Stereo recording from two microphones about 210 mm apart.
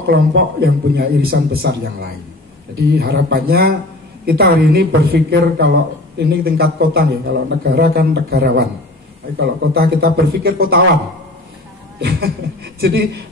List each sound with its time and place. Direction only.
0.0 s speech: 50° right (ahead or behind)
12.0 s speech: 50° right (ahead or behind)